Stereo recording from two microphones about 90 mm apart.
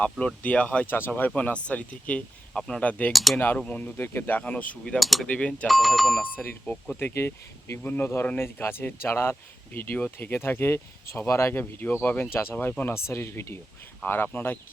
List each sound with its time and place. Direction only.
0.0 s speech: 15° left (ahead or behind)
3.1 s speech: centre (ahead or behind)
3.3 s speech: 20° left (ahead or behind)
4.9 s speech: centre (ahead or behind)
5.3 s speech: 15° left (ahead or behind)
5.6 s speech: centre (ahead or behind)
6.2 s speech: 20° left (ahead or behind)
6.9 s speech: 25° left (ahead or behind)